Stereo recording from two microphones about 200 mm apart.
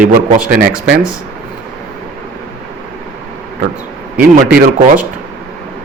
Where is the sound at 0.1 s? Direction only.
45° right (ahead or behind).